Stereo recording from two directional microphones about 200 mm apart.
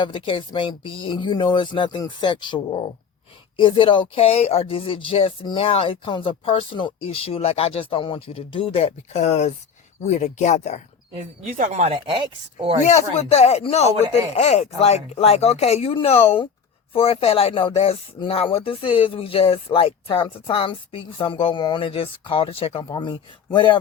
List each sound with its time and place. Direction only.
0.0 s speech: 25° left (ahead or behind)
11.1 s speech: 40° right (ahead or behind)
12.8 s speech: 35° left (ahead or behind)